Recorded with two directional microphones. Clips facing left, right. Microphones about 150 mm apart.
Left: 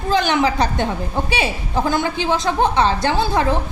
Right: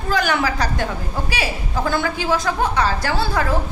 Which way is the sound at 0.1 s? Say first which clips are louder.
Left 3 dB; 25° left (ahead or behind).